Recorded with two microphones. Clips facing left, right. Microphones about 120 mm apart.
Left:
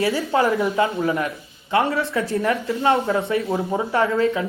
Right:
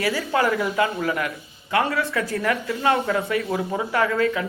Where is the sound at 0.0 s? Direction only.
25° left (ahead or behind).